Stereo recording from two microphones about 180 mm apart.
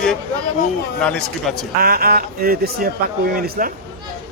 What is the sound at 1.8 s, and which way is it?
Speech, 55° right (ahead or behind).